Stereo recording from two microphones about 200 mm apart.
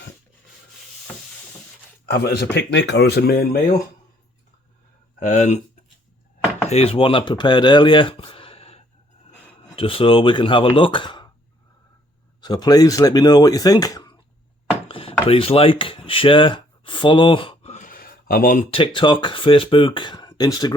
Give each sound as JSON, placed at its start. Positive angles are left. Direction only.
{"t": 2.0, "sound": "speech", "side_deg": 55}
{"t": 5.2, "sound": "speech", "side_deg": 35}
{"t": 6.7, "sound": "speech", "side_deg": 30}
{"t": 12.4, "sound": "speech", "side_deg": 20}
{"t": 14.8, "sound": "chopping", "side_deg": 25}
{"t": 15.3, "sound": "speech", "side_deg": 30}
{"t": 18.7, "sound": "speech", "side_deg": 25}